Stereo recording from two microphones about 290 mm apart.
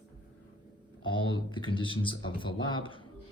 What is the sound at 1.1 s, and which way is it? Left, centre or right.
Speech, centre.